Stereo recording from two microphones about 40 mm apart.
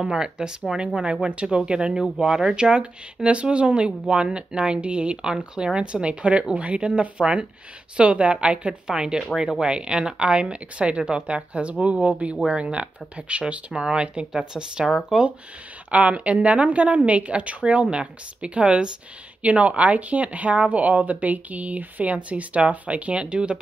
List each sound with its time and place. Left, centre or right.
0.0 s speech: right
0.9 s speech: right
2.1 s speech: centre
15.9 s speech: right